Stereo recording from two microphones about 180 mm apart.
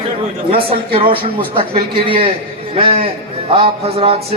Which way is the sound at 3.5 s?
30° right (ahead or behind).